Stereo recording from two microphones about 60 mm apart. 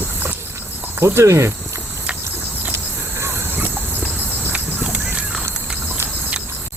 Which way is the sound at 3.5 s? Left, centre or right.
Right.